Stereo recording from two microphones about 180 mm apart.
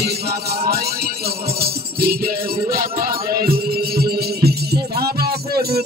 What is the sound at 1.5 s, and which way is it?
Music, 60° right (ahead or behind).